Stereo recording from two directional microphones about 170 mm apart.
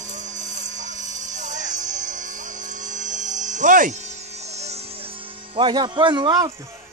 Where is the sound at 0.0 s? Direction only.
45° right (ahead or behind); by 6.5 s 25° right (ahead or behind).